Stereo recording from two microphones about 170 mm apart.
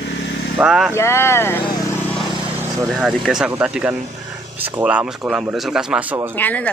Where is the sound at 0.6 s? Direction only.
5° right (ahead or behind).